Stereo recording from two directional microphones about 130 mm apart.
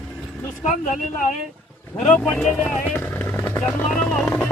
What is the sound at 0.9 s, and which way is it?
Speech, 85° left.